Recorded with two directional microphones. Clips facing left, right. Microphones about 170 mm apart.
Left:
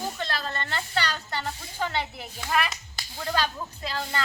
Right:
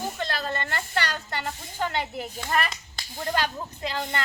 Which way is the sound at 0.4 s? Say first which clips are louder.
Right 3 dB; 15° right (ahead or behind).